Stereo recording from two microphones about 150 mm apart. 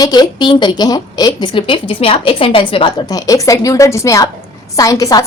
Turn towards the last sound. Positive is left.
turn(degrees=25)  # may be behind; listen again after turning